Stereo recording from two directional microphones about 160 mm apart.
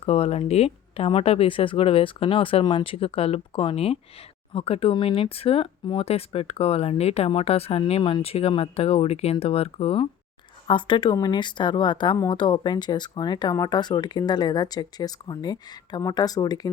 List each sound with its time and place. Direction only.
0.0 s speech: 40° left (ahead or behind); by 16.6 s 25° left (ahead or behind)